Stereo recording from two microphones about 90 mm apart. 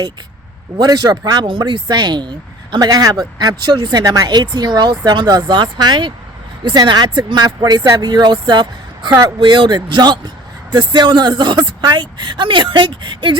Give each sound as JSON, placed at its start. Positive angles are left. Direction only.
{"t": 0.8, "sound": "speech", "side_deg": -45}
{"t": 1.5, "sound": "speech", "side_deg": -60}
{"t": 9.0, "sound": "speech", "side_deg": -40}
{"t": 9.4, "sound": "speech", "side_deg": -60}